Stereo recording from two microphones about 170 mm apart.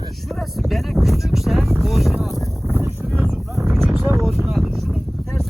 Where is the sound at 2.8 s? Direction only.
10° right (ahead or behind).